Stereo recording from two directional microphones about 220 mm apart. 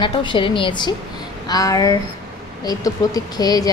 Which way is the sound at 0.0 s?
20° left (ahead or behind).